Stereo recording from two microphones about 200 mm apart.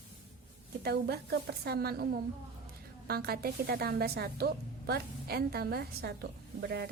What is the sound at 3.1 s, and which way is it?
A woman's voice, 50° right (ahead or behind).